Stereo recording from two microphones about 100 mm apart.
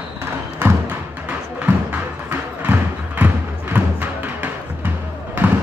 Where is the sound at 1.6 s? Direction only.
15° right (ahead or behind).